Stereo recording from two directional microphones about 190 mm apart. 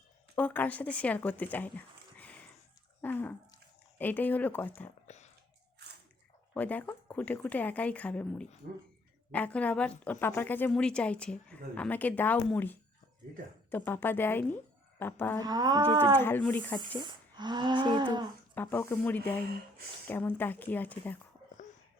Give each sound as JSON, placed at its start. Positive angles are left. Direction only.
{"t": 0.3, "sound": "a woman's voice", "side_deg": 10}
{"t": 2.1, "sound": "a sound", "side_deg": 5}
{"t": 3.9, "sound": "a woman's voice", "side_deg": 10}
{"t": 5.0, "sound": "a sound", "side_deg": 35}
{"t": 6.5, "sound": "a woman's voice", "side_deg": 10}
{"t": 15.4, "sound": "speech", "side_deg": -20}
{"t": 16.1, "sound": "a woman's voice", "side_deg": 10}
{"t": 17.0, "sound": "speech", "side_deg": -25}
{"t": 18.5, "sound": "a woman's voice", "side_deg": 10}